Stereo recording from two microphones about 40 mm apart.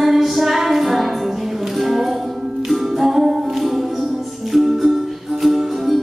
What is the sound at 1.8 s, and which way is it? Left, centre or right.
Music, centre.